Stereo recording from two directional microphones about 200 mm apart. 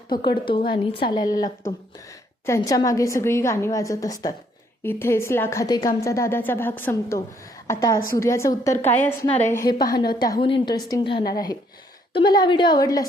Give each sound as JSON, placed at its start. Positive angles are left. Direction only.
{"t": 0.1, "sound": "a woman's voice", "side_deg": 20}
{"t": 2.6, "sound": "a woman's voice", "side_deg": 15}